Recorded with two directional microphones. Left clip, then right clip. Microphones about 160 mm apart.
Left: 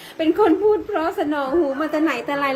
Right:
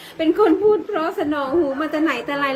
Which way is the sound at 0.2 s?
25° right (ahead or behind).